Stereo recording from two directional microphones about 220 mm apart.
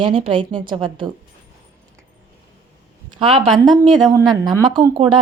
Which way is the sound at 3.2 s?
25° right (ahead or behind).